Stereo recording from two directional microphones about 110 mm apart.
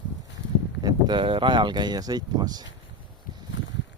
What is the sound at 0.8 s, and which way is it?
Speech, 40° right (ahead or behind).